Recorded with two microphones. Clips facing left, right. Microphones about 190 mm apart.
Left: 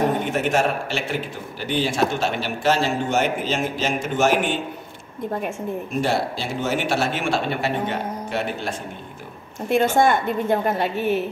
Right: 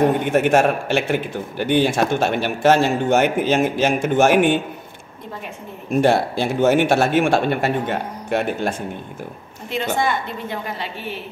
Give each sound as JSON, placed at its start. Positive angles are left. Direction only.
{"t": 0.2, "sound": "a man's voice", "side_deg": -55}
{"t": 5.9, "sound": "speech", "side_deg": -55}
{"t": 9.9, "sound": "a woman's voice", "side_deg": 50}